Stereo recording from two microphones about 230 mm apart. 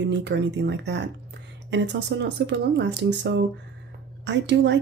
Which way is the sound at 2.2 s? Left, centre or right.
Right.